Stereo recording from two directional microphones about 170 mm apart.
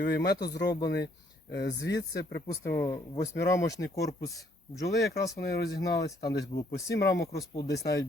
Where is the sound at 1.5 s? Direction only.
85° left.